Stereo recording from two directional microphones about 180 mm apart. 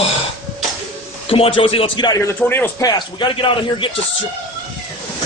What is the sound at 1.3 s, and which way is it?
A man's voice, 30° left (ahead or behind).